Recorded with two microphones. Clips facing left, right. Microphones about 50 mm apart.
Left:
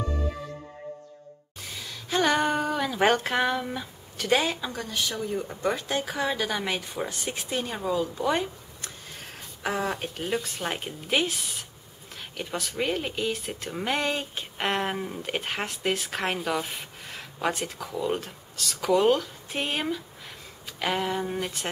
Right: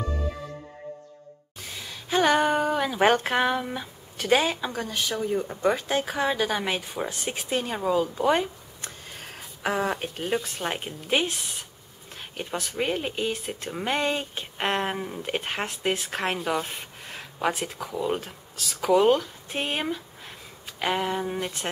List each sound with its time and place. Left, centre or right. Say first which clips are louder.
1.6 s a sound: even; centre
3.3 s speech: right 1 dB; centre
13.5 s speech: right 1 dB; centre